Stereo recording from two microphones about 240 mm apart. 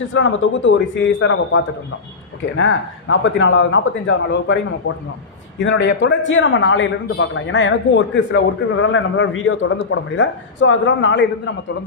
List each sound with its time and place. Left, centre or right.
0.1 s a man's voice: left
5.5 s a man's voice: left